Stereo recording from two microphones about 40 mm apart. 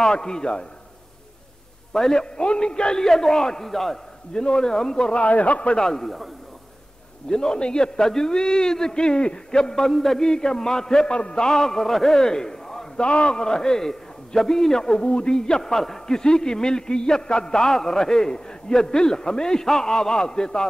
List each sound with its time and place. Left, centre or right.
0.0 s speech: centre
1.9 s a man's voice: centre
4.3 s speech: left
5.2 s a man's voice: left
5.8 s a man's voice: centre
7.2 s a man's voice: centre
13.0 s speech: left
13.4 s a man's voice: centre